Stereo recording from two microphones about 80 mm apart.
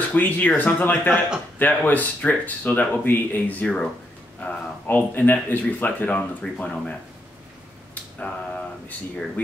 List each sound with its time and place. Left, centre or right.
0.1 s speech: left
6.4 s speech: centre